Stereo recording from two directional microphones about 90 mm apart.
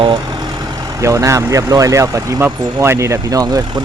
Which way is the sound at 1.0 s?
35° right (ahead or behind).